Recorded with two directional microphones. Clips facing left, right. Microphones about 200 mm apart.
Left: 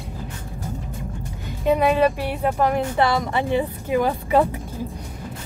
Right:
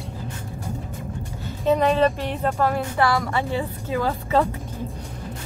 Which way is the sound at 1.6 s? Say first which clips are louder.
Left 1 dB; 10° left (ahead or behind).